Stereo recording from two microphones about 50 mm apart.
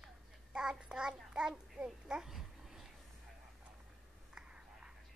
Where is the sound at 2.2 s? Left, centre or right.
Centre.